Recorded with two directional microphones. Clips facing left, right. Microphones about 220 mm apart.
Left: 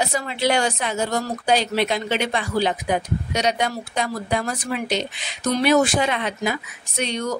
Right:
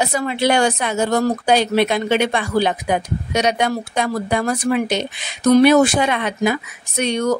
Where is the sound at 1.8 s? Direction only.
55° right (ahead or behind).